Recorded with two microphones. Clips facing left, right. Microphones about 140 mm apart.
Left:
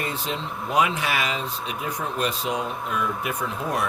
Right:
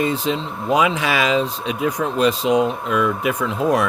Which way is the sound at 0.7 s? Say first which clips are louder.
Right 5 dB; 90° right.